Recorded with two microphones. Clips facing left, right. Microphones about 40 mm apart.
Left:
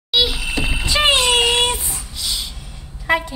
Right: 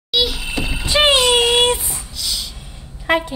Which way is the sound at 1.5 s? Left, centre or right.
Centre.